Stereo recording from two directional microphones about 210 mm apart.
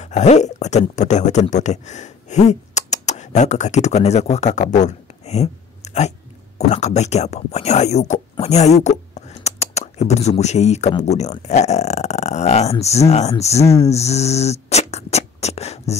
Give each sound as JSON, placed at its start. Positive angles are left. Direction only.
{"t": 0.0, "sound": "speech", "side_deg": 35}